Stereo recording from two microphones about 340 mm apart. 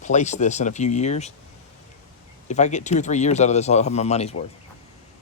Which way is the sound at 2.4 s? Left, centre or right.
Left.